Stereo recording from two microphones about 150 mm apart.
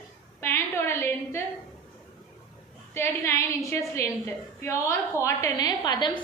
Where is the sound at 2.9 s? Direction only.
20° left (ahead or behind).